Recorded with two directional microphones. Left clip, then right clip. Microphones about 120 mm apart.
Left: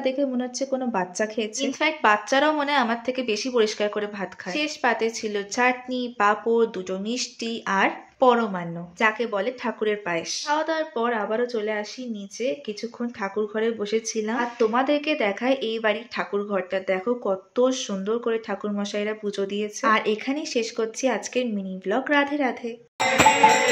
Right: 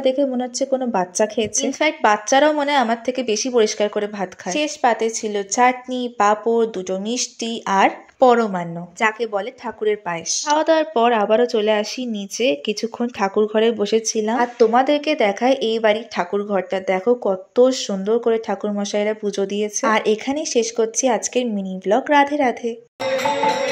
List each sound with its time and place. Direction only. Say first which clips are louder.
0.0 s speech: right 6 dB; 40° right (ahead or behind)
10.6 s speech: right 9 dB; 80° right; by 22.8 s 50° right (ahead or behind)